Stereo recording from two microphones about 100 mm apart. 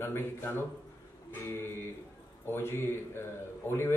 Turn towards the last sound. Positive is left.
turn(degrees=25)  # may be behind; listen again after turning